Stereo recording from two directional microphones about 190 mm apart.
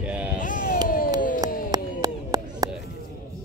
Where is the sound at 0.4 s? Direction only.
45° left (ahead or behind).